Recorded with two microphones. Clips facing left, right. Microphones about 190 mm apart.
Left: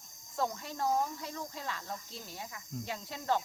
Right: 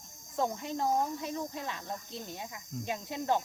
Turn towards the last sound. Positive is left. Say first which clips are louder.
# right 2 dB
turn(degrees=-20)  # may be behind; listen again after turning